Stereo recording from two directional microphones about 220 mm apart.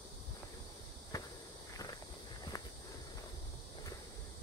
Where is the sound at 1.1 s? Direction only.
15° left (ahead or behind).